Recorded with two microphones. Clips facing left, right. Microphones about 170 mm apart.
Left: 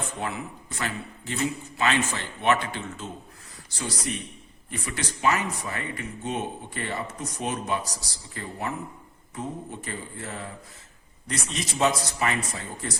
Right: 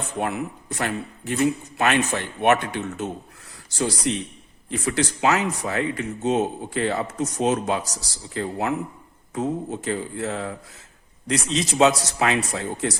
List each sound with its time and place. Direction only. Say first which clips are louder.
0.2 s speech: right 6 dB; 60° right (ahead or behind)
3.8 s speech: right 8 dB; 90° right
4.7 s speech: right 9 dB; 80° right